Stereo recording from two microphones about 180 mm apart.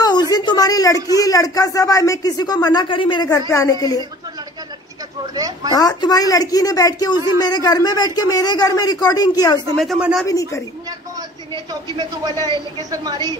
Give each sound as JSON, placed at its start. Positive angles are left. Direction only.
{"t": 0.0, "sound": "a sound", "side_deg": 20}
{"t": 1.1, "sound": "speech", "side_deg": 20}
{"t": 5.2, "sound": "a man's voice", "side_deg": -20}
{"t": 5.7, "sound": "speech", "side_deg": 20}
{"t": 9.8, "sound": "a man's voice", "side_deg": 0}
{"t": 10.9, "sound": "a man's voice", "side_deg": -20}